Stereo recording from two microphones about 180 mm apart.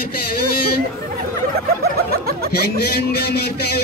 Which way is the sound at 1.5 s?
60° right (ahead or behind).